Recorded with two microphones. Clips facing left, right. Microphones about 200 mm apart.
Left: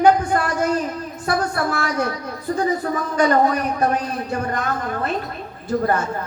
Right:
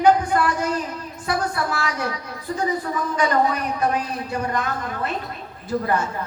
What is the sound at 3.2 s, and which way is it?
A man's voice, 45° left (ahead or behind).